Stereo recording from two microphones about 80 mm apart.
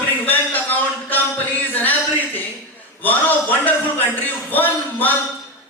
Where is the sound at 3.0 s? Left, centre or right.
Left.